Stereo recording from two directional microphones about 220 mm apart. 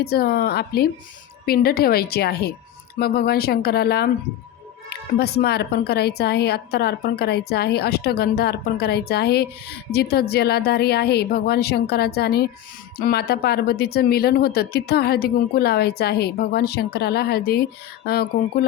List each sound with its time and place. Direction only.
0.0 s a woman's voice: 45° left (ahead or behind)